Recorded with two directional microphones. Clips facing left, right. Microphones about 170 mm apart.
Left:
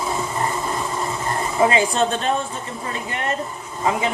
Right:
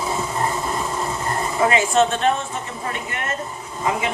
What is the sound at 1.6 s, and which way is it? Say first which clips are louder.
Speech: left 1 dB; 25° left (ahead or behind).